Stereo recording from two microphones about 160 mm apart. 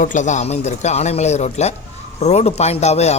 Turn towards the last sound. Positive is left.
turn(degrees=45)  # may be behind; listen again after turning